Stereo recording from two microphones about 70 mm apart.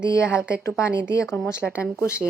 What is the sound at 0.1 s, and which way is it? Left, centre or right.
A woman's voice, left.